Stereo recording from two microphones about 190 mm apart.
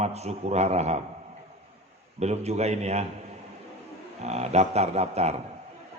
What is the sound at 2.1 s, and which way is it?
Speech, 35° right (ahead or behind).